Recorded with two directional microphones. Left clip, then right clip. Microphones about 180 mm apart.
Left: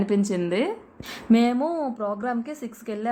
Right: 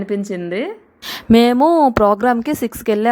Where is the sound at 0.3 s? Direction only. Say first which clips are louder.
Right 2 dB; 15° right (ahead or behind).